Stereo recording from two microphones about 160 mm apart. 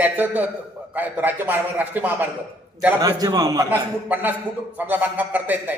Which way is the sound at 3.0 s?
20° right (ahead or behind).